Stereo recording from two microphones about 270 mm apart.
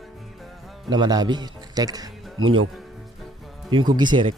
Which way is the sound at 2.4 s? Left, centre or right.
Right.